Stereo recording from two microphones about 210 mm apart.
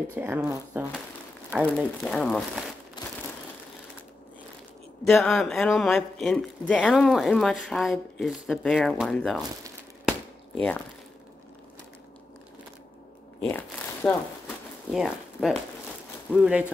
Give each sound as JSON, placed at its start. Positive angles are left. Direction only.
{"t": 0.1, "sound": "speech", "side_deg": -10}
{"t": 1.5, "sound": "speech", "side_deg": 0}
{"t": 3.0, "sound": "crushing", "side_deg": 20}
{"t": 5.0, "sound": "speech", "side_deg": 5}
{"t": 13.4, "sound": "crumpling", "side_deg": 10}
{"t": 14.9, "sound": "speech", "side_deg": 0}